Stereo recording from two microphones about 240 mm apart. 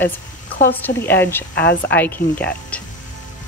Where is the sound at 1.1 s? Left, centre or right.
Centre.